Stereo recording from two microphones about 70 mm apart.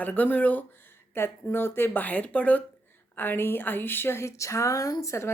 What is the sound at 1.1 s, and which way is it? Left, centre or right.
Speech, left.